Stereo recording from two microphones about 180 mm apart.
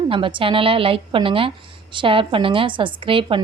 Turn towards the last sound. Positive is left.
turn(degrees=-30)  # may be behind; listen again after turning